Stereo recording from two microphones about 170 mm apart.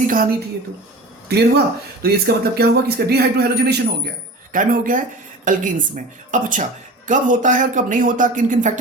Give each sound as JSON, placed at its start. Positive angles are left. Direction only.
{"t": 1.3, "sound": "speech", "side_deg": -70}
{"t": 4.5, "sound": "a woman's voice", "side_deg": -55}